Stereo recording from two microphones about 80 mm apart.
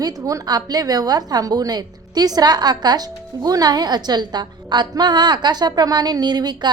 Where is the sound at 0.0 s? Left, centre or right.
Right.